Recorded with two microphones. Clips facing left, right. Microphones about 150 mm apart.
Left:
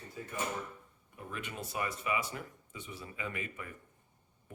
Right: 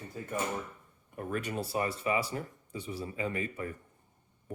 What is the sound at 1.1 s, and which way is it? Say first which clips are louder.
Speech: right 8 dB; 45° right (ahead or behind).